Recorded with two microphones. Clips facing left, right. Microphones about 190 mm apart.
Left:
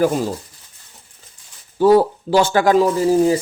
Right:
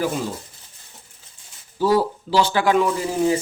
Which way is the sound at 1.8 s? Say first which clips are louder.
Left 6 dB; 55° left (ahead or behind).